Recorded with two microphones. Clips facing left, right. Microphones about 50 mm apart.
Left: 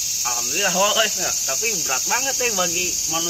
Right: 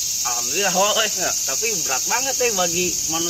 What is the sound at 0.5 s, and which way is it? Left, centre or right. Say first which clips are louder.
Speech: even; centre.